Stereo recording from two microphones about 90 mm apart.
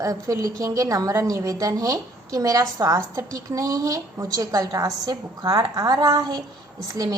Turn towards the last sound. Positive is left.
turn(degrees=-40)  # may be behind; listen again after turning